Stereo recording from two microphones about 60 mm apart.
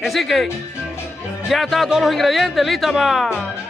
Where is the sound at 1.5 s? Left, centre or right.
Centre.